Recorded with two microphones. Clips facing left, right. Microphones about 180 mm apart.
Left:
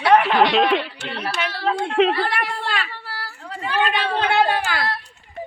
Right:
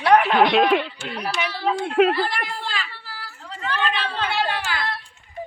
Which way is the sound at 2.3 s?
65° left (ahead or behind).